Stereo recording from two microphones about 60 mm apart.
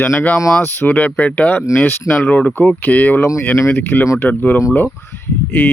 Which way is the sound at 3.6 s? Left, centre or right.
Left.